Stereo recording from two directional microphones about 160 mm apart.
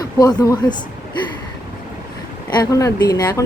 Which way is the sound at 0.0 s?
25° left (ahead or behind).